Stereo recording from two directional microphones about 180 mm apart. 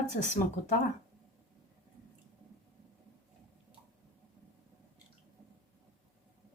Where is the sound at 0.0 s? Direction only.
40° left (ahead or behind).